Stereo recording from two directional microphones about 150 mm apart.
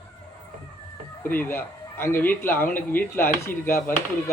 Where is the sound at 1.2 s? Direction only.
15° left (ahead or behind).